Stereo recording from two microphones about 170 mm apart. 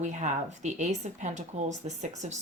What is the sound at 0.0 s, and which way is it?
Speech, 45° right (ahead or behind).